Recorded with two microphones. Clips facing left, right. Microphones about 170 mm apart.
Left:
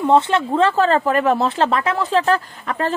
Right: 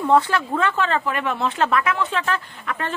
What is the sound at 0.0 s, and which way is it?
Speech, 25° left (ahead or behind).